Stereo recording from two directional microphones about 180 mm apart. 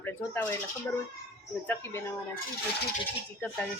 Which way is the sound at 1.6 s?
10° left (ahead or behind).